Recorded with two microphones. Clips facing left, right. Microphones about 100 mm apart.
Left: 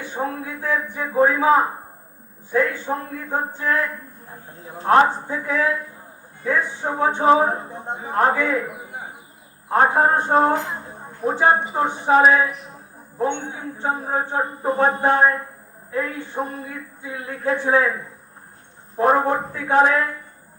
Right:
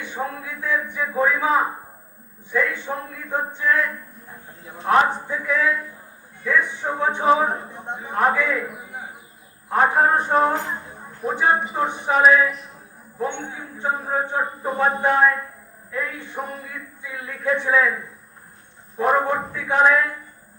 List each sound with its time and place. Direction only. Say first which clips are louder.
0.0 s a man's voice: left 2 dB; 40° left (ahead or behind)
9.6 s a man's voice: left 1 dB; 40° left (ahead or behind)
19.5 s a woman's voice: even; 45° left (ahead or behind)